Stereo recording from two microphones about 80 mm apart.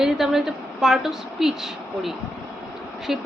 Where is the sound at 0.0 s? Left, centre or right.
Centre.